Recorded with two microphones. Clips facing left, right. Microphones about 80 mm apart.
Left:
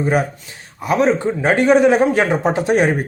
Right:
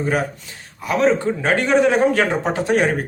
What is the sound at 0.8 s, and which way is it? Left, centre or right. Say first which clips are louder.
A man's voice: left 2 dB; left.